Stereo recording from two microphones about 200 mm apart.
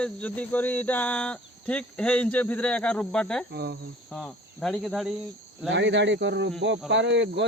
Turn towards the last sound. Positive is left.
turn(degrees=-60)  # may be behind; listen again after turning